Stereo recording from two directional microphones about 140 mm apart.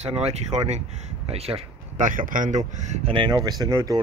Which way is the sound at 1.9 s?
70° right (ahead or behind).